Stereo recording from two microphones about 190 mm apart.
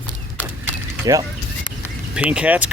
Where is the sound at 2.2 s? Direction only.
5° right (ahead or behind).